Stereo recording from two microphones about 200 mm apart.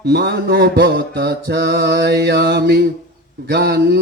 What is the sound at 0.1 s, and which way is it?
Mantra, 55° right (ahead or behind).